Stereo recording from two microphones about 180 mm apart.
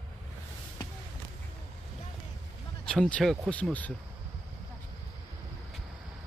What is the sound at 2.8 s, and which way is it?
Speech, 5° left (ahead or behind).